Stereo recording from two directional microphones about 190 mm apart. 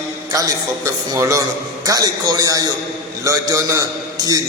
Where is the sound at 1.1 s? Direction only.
15° right (ahead or behind).